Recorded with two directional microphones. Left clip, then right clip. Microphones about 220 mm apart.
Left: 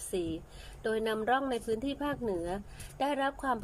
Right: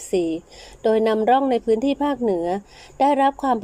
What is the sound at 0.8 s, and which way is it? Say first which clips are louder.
Speech: right 14 dB; 25° right (ahead or behind).